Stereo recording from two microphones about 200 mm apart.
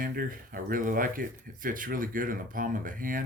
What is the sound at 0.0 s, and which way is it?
Speech, 45° right (ahead or behind).